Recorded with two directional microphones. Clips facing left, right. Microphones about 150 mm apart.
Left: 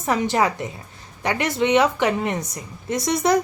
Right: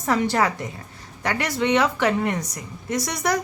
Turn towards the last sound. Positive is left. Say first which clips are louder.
# left 4 dB
turn(degrees=25)  # may be behind; listen again after turning